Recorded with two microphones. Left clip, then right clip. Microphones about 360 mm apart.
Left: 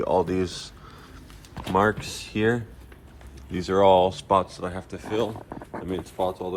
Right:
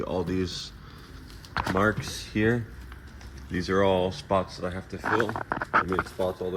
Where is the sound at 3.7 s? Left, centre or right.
Left.